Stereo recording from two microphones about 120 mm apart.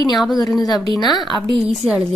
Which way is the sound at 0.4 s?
35° left (ahead or behind).